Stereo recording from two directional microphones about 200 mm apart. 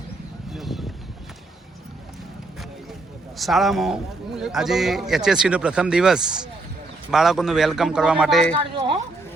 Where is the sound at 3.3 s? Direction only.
Centre (ahead or behind).